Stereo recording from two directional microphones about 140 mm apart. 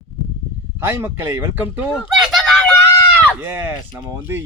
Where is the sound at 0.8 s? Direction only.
15° right (ahead or behind).